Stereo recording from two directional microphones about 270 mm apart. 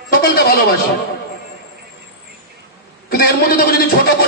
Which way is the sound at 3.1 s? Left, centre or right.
Left.